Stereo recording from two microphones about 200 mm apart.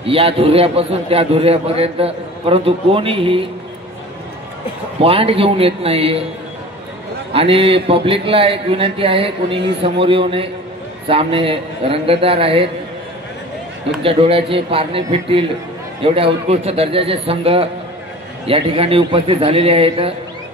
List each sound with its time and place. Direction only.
0.0 s a man's voice: 30° right (ahead or behind)
5.0 s a man's voice: 30° right (ahead or behind)
7.3 s a man's voice: 30° right (ahead or behind)
14.0 s a man's voice: 30° right (ahead or behind)